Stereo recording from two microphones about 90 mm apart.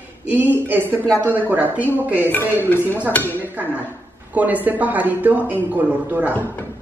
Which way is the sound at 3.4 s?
20° right (ahead or behind).